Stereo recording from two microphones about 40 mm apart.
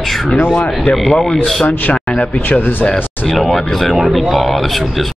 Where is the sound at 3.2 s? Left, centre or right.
Centre.